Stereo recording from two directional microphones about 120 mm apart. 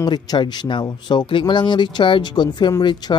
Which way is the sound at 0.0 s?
35° left (ahead or behind).